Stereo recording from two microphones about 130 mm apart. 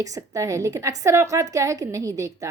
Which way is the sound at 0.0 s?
25° right (ahead or behind).